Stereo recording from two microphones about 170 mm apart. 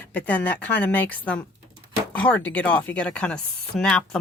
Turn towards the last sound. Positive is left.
turn(degrees=5)  # may be behind; listen again after turning